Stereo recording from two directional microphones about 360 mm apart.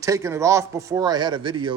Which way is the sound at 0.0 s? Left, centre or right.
Centre.